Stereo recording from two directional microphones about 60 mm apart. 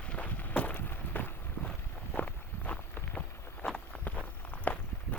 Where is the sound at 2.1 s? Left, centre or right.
Left.